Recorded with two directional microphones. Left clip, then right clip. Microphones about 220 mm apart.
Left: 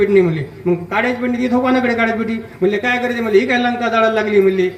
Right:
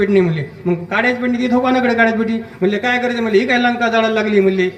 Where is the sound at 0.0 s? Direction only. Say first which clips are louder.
Left 2 dB; 45° right (ahead or behind).